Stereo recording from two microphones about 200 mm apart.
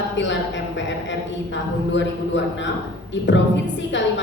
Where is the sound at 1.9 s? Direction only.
65° left (ahead or behind).